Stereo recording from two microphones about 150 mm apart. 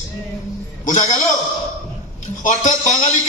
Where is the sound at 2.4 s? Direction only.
55° left (ahead or behind).